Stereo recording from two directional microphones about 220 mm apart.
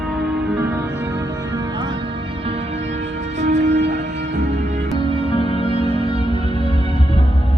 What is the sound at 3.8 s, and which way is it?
Music, 50° right (ahead or behind).